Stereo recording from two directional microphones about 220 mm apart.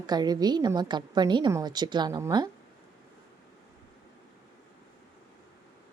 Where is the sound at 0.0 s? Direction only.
20° right (ahead or behind).